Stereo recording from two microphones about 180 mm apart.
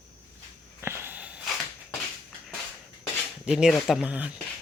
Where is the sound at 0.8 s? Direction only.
15° right (ahead or behind).